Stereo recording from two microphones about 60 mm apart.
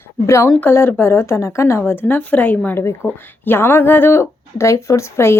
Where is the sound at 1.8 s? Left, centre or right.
Left.